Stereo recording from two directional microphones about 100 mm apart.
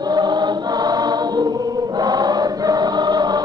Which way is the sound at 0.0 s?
45° right (ahead or behind).